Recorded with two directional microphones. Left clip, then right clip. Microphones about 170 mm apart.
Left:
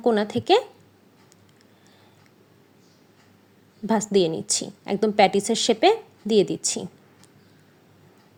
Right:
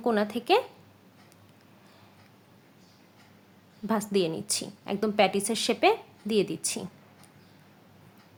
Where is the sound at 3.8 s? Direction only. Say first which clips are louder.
Left 6 dB; 25° left (ahead or behind).